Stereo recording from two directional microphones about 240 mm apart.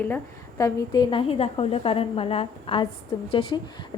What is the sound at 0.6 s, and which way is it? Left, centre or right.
A woman's voice, centre.